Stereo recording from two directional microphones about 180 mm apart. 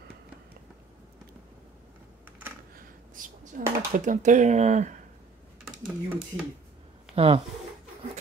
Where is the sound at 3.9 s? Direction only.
45° right (ahead or behind).